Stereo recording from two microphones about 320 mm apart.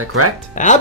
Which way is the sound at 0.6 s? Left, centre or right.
Left.